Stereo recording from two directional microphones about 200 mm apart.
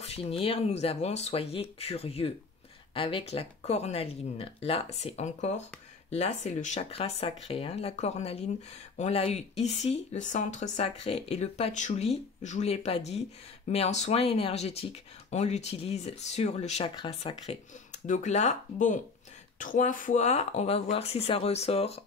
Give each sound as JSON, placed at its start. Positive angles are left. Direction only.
{"t": 0.0, "sound": "speech", "side_deg": 30}